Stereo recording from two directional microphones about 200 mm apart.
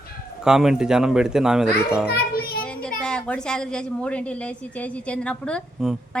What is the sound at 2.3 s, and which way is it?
Speech, 50° left (ahead or behind).